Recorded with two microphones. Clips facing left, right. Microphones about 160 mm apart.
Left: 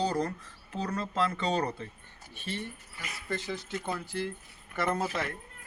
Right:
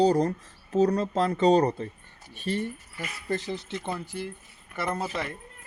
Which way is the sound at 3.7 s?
20° right (ahead or behind).